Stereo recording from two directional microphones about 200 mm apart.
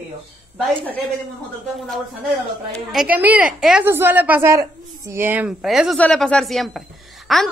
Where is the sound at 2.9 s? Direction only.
5° right (ahead or behind).